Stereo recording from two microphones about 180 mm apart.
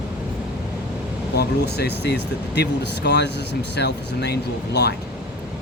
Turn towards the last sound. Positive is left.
turn(degrees=70)  # may be behind; listen again after turning